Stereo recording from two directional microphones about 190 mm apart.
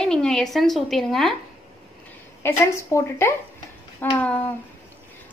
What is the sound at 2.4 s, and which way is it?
Speech, 15° left (ahead or behind).